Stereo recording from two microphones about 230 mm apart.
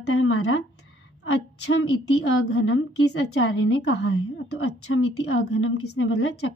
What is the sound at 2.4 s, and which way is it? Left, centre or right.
Speech, left.